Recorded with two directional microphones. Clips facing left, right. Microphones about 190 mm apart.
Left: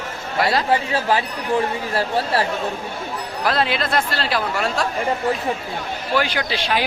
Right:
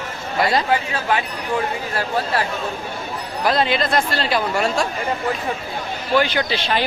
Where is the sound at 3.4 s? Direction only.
Centre (ahead or behind).